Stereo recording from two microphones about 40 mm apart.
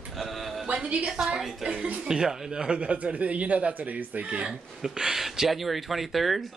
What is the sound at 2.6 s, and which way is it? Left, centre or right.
Speech, right.